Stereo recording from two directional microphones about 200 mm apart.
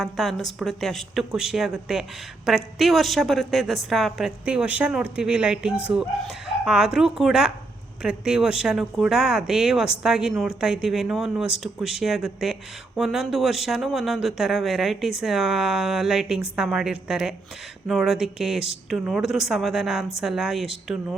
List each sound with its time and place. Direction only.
0.0 s speech: centre (ahead or behind)